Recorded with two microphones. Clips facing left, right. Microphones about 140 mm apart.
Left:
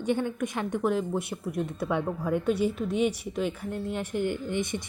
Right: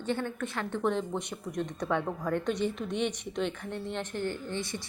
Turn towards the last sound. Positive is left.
turn(degrees=20)  # may be behind; listen again after turning